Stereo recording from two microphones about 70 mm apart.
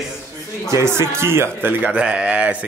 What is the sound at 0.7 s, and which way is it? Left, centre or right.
Speech, right.